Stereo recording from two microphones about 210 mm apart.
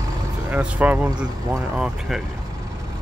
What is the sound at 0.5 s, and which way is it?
Speech, 5° right (ahead or behind).